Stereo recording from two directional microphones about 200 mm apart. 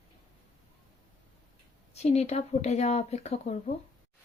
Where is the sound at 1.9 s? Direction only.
30° left (ahead or behind).